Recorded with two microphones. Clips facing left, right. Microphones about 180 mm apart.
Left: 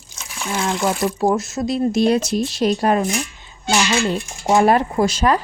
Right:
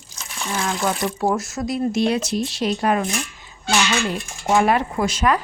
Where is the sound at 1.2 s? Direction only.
25° left (ahead or behind).